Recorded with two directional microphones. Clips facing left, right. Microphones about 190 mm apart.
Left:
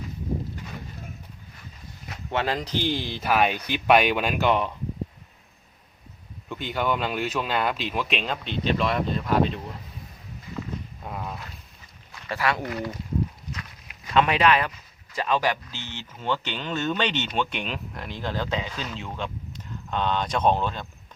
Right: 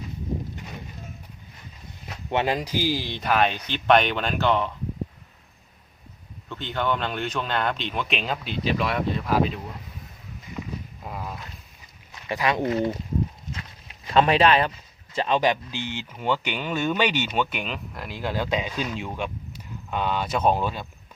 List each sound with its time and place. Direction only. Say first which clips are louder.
2.3 s speech: right 2 dB; 15° right (ahead or behind); by 4.7 s 15° left (ahead or behind)
6.5 s speech: even; 10° left (ahead or behind)
11.0 s a sound: even; centre (ahead or behind)
12.3 s speech: right 3 dB; 20° right (ahead or behind)
13.5 s a sound: right 1 dB; 30° right (ahead or behind)
15.1 s speech: right 3 dB; 25° right (ahead or behind); by 20.8 s 10° right (ahead or behind)